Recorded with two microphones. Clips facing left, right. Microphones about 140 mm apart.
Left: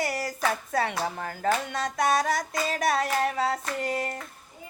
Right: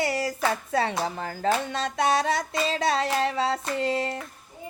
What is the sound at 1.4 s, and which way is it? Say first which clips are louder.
Music: right 1 dB; 25° right (ahead or behind).